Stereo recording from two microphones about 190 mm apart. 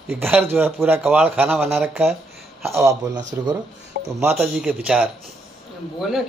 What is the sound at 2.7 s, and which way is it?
Speech, 15° right (ahead or behind).